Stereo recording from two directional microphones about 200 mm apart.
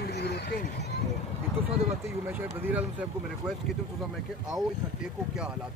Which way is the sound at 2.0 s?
10° right (ahead or behind).